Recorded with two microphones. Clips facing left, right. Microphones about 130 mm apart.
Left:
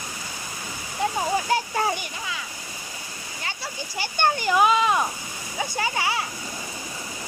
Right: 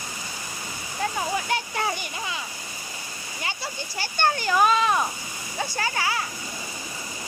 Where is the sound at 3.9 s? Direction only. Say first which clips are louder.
Left 1 dB; 15° left (ahead or behind).